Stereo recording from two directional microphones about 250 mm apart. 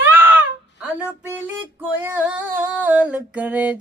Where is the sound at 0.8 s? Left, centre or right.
Centre.